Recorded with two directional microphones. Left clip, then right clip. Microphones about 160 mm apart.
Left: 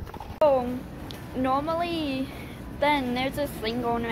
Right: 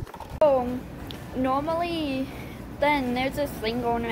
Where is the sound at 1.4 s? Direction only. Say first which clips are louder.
Even; 5° right (ahead or behind).